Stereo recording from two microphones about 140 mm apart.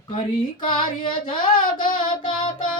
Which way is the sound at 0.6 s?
35° left (ahead or behind).